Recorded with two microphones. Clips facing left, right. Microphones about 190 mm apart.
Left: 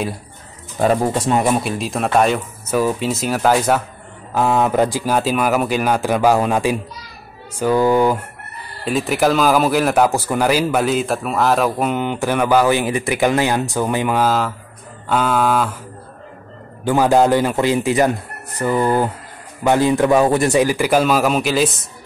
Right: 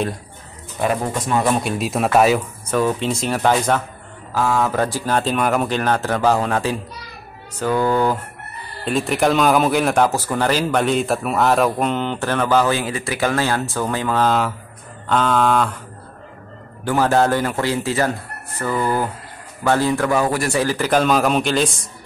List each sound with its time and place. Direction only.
0.7 s a man's voice: 30° left (ahead or behind)
1.5 s speech: centre (ahead or behind)
4.3 s speech: 20° left (ahead or behind)
8.8 s speech: centre (ahead or behind)
16.8 s a man's voice: 15° left (ahead or behind)